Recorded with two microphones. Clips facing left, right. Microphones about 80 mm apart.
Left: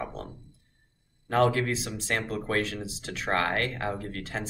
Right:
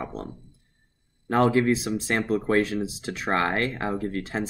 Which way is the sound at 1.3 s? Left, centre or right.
Right.